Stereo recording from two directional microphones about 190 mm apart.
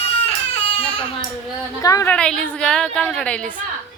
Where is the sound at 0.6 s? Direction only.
30° left (ahead or behind).